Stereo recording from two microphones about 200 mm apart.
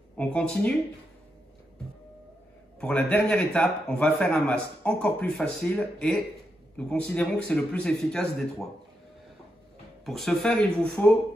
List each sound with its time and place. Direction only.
0.2 s a man's voice: 5° left (ahead or behind)
2.8 s a man's voice: 5° left (ahead or behind)
10.0 s a man's voice: centre (ahead or behind)